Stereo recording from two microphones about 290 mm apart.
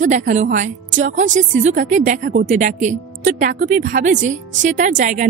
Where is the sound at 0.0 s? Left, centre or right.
Right.